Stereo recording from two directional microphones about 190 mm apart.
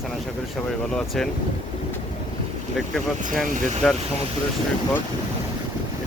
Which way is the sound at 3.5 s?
45° right (ahead or behind).